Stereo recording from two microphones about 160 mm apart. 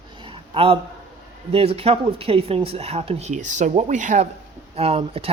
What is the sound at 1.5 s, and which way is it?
Speech, 35° right (ahead or behind).